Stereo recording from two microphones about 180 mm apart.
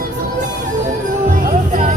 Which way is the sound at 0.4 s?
45° right (ahead or behind).